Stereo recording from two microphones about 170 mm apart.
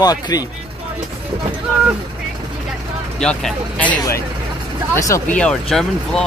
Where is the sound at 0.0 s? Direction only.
20° left (ahead or behind).